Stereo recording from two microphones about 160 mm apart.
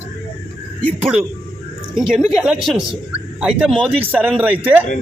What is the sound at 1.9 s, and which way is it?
A woman's voice, 5° right (ahead or behind).